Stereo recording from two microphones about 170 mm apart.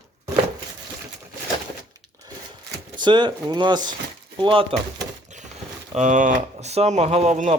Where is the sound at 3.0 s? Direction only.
25° right (ahead or behind).